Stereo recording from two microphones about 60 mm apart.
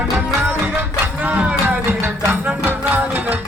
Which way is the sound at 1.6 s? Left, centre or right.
Right.